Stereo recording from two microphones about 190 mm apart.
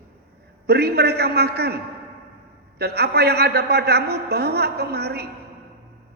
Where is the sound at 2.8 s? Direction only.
60° right (ahead or behind).